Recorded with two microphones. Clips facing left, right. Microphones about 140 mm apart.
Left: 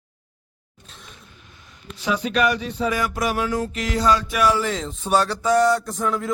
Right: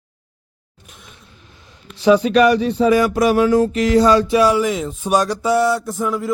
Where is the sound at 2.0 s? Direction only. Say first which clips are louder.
Right 9 dB; 30° right (ahead or behind).